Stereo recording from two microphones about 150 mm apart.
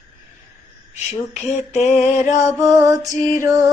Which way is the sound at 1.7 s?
50° left (ahead or behind).